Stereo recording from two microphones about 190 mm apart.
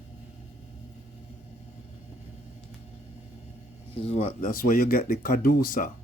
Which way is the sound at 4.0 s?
35° left (ahead or behind).